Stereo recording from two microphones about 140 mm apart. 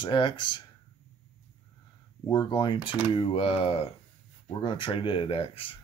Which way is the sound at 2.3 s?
30° left (ahead or behind).